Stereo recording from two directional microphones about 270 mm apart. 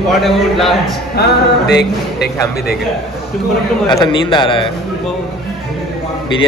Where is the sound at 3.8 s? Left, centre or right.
Centre.